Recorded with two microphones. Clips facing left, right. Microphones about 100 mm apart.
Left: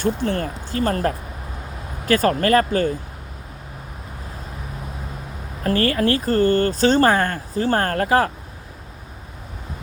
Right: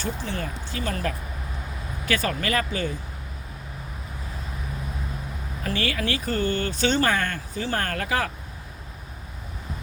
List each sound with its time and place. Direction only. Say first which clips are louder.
0.0 s speech: left 8 dB; 55° left (ahead or behind)
5.6 s speech: left 8 dB; 45° left (ahead or behind)